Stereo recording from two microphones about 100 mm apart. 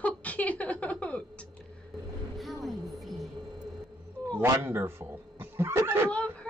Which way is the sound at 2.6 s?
Centre (ahead or behind).